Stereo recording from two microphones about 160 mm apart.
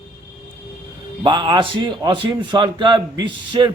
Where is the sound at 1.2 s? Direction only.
30° right (ahead or behind).